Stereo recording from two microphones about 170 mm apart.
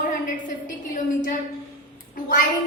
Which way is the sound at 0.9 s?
50° left (ahead or behind).